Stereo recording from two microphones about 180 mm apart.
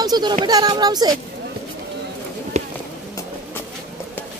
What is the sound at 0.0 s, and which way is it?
A child's voice, 20° right (ahead or behind).